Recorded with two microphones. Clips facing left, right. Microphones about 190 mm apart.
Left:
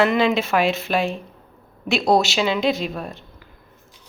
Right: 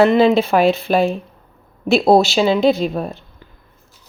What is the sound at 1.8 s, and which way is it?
Speech, 35° right (ahead or behind).